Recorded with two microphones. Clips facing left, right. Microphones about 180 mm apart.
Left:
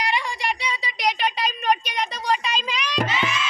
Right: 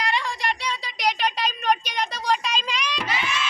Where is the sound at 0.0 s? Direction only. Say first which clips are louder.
Left 1 dB; 15° left (ahead or behind).